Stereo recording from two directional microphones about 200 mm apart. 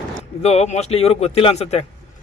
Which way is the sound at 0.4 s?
30° left (ahead or behind).